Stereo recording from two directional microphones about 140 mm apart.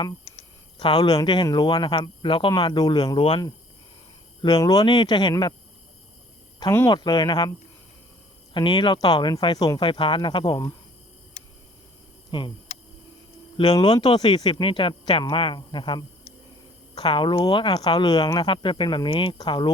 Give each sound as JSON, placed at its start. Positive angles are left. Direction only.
{"t": 0.8, "sound": "speech", "side_deg": 30}
{"t": 4.4, "sound": "speech", "side_deg": 30}
{"t": 6.7, "sound": "speech", "side_deg": 25}
{"t": 8.5, "sound": "speech", "side_deg": 35}
{"t": 12.3, "sound": "speech", "side_deg": 35}
{"t": 13.6, "sound": "speech", "side_deg": 30}